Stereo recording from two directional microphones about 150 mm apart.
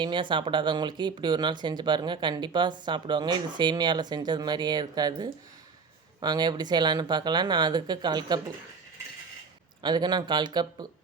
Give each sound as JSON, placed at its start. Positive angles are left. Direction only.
{"t": 0.0, "sound": "speech", "side_deg": -30}
{"t": 9.8, "sound": "speech", "side_deg": -30}